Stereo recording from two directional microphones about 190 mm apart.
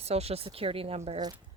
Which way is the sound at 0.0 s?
35° right (ahead or behind).